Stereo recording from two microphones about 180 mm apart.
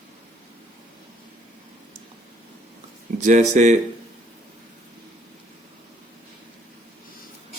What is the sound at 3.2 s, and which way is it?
Speech, 40° right (ahead or behind).